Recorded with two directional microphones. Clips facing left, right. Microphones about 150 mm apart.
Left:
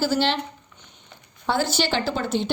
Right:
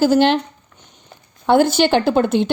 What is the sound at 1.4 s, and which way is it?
A woman's voice, 55° right (ahead or behind).